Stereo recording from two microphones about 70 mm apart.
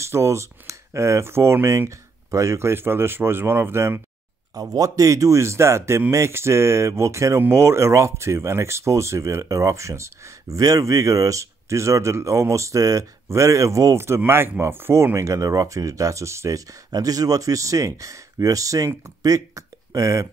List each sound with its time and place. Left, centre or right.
0.0 s speech: right
4.6 s speech: right
10.6 s speech: right